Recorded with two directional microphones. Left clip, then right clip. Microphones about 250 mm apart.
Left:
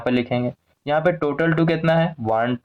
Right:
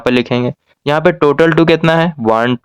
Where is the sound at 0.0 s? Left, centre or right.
Right.